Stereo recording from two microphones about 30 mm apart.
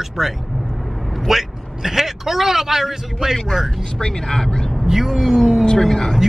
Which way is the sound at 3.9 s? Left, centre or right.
Left.